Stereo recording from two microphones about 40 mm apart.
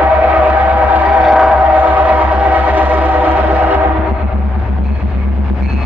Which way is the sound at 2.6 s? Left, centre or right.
Right.